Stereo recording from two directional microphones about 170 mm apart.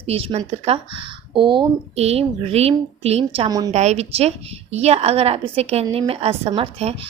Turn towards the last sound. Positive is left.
turn(degrees=-35)  # may be behind; listen again after turning